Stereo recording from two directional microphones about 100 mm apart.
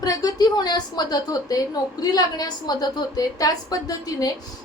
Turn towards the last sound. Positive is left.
turn(degrees=40)  # may be behind; listen again after turning